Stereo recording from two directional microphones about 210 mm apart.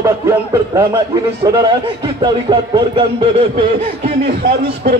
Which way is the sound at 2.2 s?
20° right (ahead or behind).